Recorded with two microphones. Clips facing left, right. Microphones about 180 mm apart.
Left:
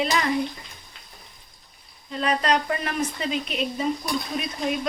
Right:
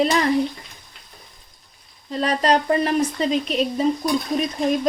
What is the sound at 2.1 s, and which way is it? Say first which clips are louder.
Speech: right 4 dB; 35° right (ahead or behind).